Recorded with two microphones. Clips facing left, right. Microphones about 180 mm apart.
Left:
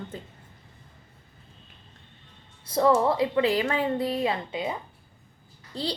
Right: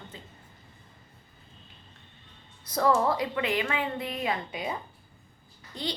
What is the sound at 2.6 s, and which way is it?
A woman's voice, 25° left (ahead or behind).